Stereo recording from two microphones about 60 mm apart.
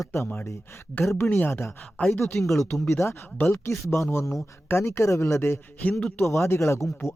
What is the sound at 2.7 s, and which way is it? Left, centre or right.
Speech, left.